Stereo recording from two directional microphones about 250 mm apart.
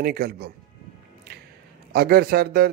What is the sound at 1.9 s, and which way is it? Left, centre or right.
Speech, right.